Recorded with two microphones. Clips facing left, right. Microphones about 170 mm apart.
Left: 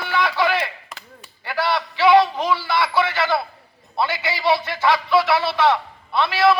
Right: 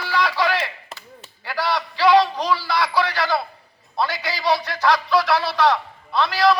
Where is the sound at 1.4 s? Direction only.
Centre (ahead or behind).